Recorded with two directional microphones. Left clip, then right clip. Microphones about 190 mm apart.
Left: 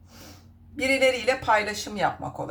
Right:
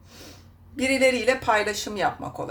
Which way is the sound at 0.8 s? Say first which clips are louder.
Right 1 dB; 25° right (ahead or behind).